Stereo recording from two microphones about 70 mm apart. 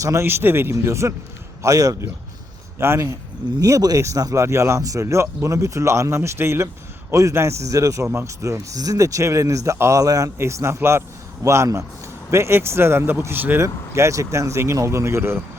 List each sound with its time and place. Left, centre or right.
0.0 s speech: right
0.3 s speech: right
1.6 s a man's voice: right
2.7 s speech: right
3.6 s speech: right
10.0 s a man's voice: right
10.3 s speech: right
13.6 s speech: right